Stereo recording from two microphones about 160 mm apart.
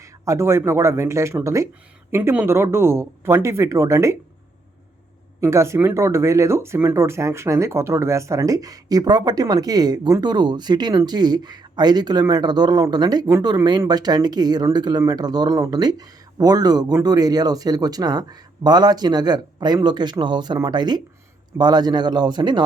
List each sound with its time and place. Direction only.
0.0 s speech: 20° right (ahead or behind)
5.4 s speech: 15° right (ahead or behind)